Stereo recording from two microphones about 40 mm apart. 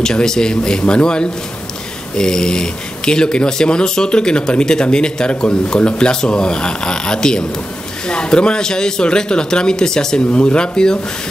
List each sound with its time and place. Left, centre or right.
0.0 s speech: centre